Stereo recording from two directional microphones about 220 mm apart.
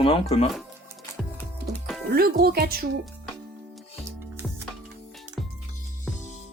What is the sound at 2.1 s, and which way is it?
Speech, 45° right (ahead or behind).